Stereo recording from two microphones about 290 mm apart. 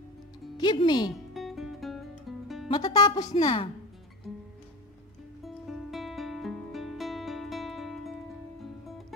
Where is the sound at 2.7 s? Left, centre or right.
Centre.